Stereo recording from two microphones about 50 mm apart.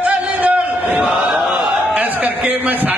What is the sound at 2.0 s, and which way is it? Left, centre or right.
A man's voice, right.